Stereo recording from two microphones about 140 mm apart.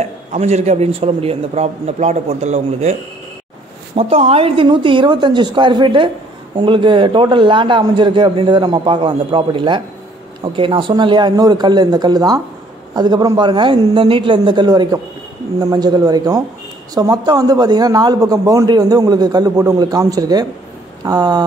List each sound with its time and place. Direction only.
0.0 s a man's voice: 50° right (ahead or behind)
3.9 s a man's voice: 40° right (ahead or behind)